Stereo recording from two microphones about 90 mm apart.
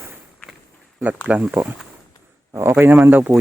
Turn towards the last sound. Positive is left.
turn(degrees=-25)  # may be behind; listen again after turning